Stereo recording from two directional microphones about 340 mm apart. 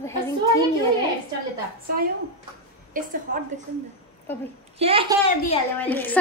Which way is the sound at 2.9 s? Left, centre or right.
Right.